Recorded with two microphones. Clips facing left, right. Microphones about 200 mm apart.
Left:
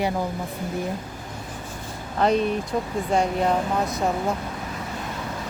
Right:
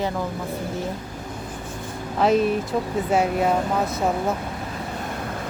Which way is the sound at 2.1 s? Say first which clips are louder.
Right 2 dB; centre (ahead or behind).